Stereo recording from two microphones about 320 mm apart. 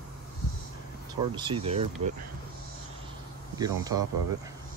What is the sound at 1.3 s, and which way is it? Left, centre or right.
Speech, centre.